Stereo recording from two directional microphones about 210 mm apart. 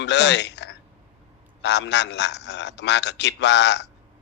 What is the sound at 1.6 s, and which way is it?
Speech, 55° left (ahead or behind).